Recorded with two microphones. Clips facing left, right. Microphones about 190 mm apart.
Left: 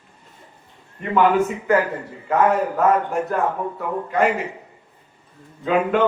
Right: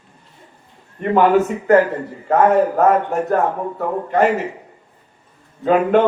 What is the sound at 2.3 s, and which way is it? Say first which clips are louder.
A man's voice: right 4 dB; 45° right (ahead or behind).